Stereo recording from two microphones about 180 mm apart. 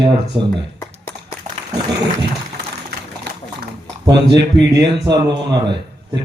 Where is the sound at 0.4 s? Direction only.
25° right (ahead or behind).